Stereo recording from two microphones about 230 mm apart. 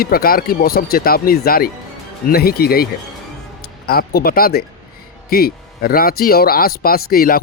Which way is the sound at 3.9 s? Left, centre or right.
Left.